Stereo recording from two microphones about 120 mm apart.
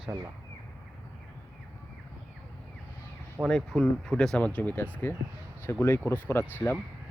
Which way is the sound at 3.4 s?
5° left (ahead or behind).